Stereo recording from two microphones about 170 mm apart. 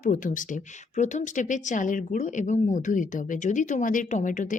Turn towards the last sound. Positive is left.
turn(degrees=50)  # may be behind; listen again after turning